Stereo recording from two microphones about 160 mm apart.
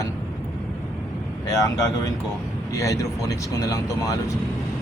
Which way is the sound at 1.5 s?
20° left (ahead or behind).